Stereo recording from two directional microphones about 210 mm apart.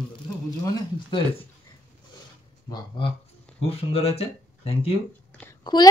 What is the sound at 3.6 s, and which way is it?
A woman's voice, 30° left (ahead or behind).